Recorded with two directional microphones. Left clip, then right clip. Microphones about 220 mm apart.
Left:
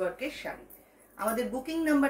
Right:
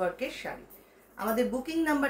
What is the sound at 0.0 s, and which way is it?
Speech, 15° right (ahead or behind).